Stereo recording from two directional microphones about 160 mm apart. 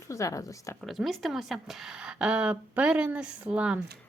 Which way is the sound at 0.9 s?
Centre (ahead or behind).